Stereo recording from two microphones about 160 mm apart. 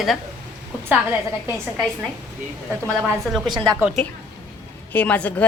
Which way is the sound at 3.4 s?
30° right (ahead or behind).